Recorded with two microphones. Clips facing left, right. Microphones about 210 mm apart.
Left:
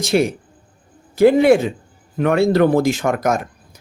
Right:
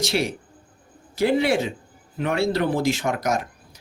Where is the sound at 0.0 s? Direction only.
50° left (ahead or behind).